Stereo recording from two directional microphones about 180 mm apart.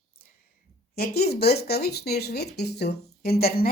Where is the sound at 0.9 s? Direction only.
60° left (ahead or behind).